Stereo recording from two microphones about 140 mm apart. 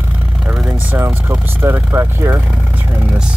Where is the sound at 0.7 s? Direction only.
15° right (ahead or behind).